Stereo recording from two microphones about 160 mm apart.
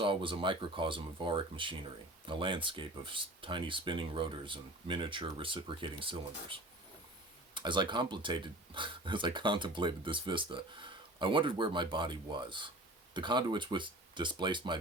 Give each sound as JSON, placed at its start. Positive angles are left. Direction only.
{"t": 0.0, "sound": "speech", "side_deg": -30}